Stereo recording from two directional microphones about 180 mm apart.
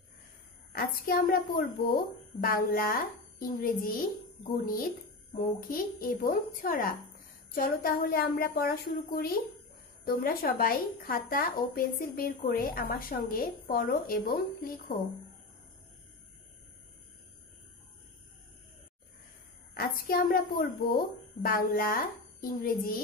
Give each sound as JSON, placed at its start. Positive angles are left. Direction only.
{"t": 0.7, "sound": "a woman's voice", "side_deg": 55}
{"t": 19.7, "sound": "a woman's voice", "side_deg": 55}